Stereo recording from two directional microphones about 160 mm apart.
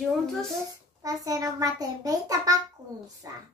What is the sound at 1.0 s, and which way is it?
A child's voice, 20° right (ahead or behind).